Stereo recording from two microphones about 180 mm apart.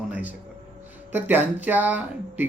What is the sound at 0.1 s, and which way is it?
Music, 10° right (ahead or behind).